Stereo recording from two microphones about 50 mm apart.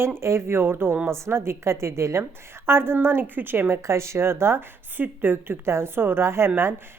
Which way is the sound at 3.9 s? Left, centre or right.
Right.